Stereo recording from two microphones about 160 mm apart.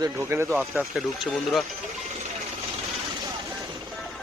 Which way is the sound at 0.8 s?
Centre (ahead or behind).